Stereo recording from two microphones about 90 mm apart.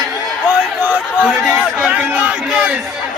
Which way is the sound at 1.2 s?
5° left (ahead or behind).